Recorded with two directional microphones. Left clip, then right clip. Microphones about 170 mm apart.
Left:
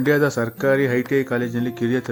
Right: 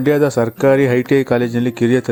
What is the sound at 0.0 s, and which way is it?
Speech, 25° right (ahead or behind).